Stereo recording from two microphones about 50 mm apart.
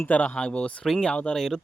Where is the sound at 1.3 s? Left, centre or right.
Centre.